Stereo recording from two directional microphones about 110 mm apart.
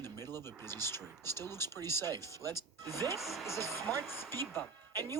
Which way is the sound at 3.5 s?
25° left (ahead or behind).